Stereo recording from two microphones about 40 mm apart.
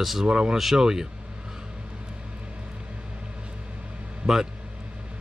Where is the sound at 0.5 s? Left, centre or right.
Centre.